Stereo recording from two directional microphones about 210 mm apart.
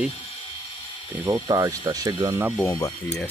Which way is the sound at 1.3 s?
15° right (ahead or behind).